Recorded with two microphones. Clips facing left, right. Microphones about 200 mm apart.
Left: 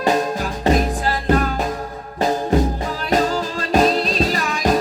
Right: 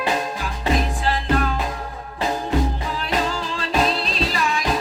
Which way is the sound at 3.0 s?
45° left (ahead or behind).